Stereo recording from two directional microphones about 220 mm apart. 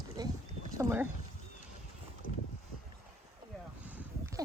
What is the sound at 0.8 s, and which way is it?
Speech, 10° right (ahead or behind).